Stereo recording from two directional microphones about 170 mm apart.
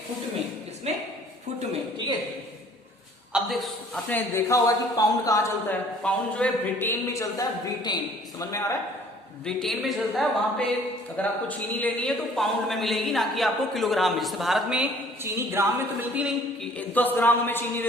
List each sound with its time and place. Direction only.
0.9 s a sound: 40° right (ahead or behind)
3.3 s a sound: centre (ahead or behind)
4.1 s speech: 15° left (ahead or behind)
6.0 s speech: 5° left (ahead or behind)
9.4 s a man's voice: 5° left (ahead or behind)
16.7 s speech: 10° left (ahead or behind)